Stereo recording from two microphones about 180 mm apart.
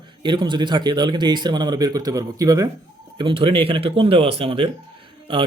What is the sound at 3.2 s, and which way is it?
Speech, 30° right (ahead or behind).